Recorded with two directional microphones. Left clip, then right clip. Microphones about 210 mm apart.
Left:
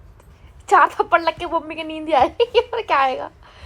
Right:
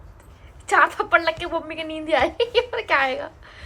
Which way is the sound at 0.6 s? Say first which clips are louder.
Left 4 dB; 25° left (ahead or behind).